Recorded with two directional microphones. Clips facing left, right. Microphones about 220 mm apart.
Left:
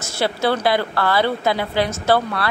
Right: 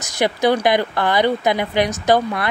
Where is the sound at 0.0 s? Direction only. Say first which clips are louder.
Right 3 dB; 15° right (ahead or behind).